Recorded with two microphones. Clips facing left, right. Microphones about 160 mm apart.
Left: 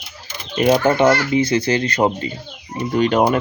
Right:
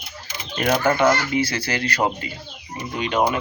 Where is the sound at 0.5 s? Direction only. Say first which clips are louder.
Left 5 dB; 20° left (ahead or behind).